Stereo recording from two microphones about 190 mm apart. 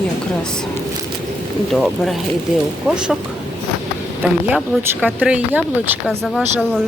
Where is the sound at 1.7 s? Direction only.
Centre (ahead or behind).